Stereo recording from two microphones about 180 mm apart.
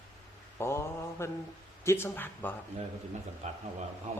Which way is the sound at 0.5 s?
15° left (ahead or behind).